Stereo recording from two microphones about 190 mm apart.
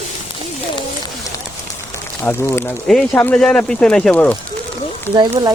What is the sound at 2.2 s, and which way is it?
Speech, 10° left (ahead or behind).